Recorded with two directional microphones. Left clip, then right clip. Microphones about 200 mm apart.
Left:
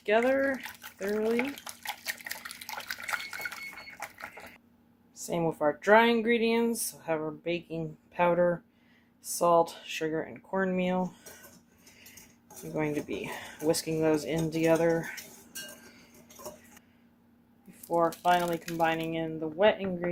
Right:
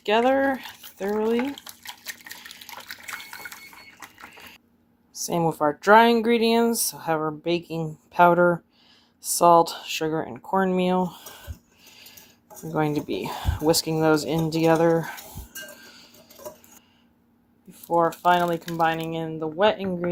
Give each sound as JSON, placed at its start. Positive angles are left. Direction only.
{"t": 0.0, "sound": "speech", "side_deg": -45}
{"t": 1.6, "sound": "dishes", "side_deg": 5}
{"t": 2.6, "sound": "water", "side_deg": 5}
{"t": 5.2, "sound": "speech", "side_deg": -40}
{"t": 12.7, "sound": "speech", "side_deg": -45}
{"t": 17.8, "sound": "speech", "side_deg": -50}